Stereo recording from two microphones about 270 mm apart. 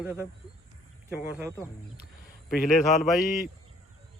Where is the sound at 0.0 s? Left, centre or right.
Centre.